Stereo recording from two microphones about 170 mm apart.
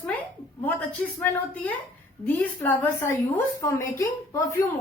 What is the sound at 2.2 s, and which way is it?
A woman's voice, 10° left (ahead or behind).